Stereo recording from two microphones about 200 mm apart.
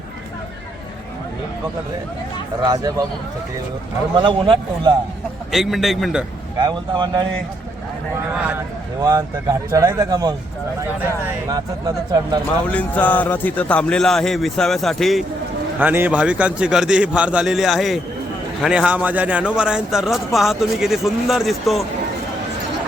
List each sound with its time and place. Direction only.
2.6 s speech: 20° right (ahead or behind)
4.2 s speech: 25° right (ahead or behind)
5.5 s a man's voice: centre (ahead or behind)
6.6 s speech: 20° right (ahead or behind)
8.1 s speech: 5° right (ahead or behind)
11.4 s speech: 20° right (ahead or behind)
12.7 s a man's voice: 10° left (ahead or behind)